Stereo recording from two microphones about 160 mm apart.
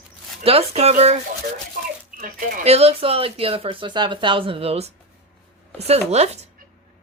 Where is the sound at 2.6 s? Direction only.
40° right (ahead or behind).